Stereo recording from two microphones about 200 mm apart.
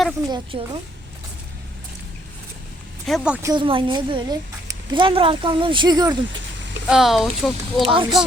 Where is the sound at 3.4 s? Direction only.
25° right (ahead or behind).